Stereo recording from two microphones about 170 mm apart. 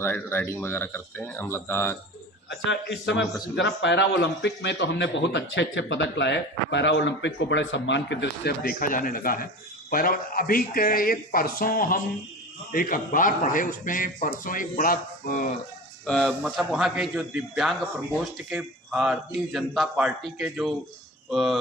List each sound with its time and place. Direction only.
0.0 s speech: 10° left (ahead or behind)
2.5 s a man's voice: 90° left; by 15.4 s 55° left (ahead or behind)
16.0 s a man's voice: centre (ahead or behind)